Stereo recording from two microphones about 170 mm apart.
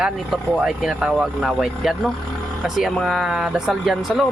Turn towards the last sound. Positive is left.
turn(degrees=0)  # may be behind; listen again after turning